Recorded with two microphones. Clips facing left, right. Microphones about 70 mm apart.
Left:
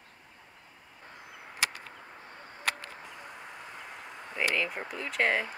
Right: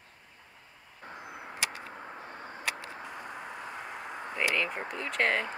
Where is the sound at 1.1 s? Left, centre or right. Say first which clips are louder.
Right 5 dB; right.